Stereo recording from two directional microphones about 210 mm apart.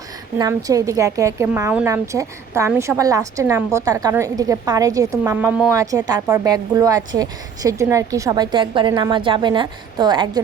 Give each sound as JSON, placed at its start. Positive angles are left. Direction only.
{"t": 0.3, "sound": "a woman's voice", "side_deg": -15}